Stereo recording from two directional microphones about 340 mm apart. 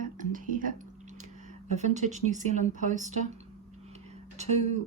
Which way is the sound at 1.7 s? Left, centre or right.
Right.